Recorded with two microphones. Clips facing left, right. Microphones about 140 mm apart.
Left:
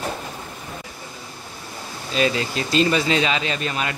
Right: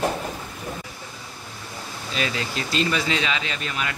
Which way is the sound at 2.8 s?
35° left (ahead or behind).